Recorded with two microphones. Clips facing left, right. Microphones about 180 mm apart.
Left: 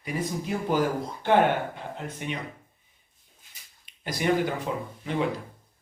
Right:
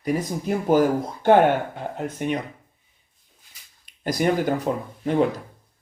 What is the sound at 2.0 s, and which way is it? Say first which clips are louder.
Speech: right 9 dB; 45° right (ahead or behind).